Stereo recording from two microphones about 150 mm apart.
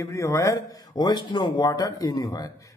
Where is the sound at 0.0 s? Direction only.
20° left (ahead or behind).